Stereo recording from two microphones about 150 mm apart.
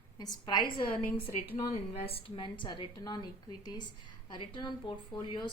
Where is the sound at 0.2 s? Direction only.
30° left (ahead or behind).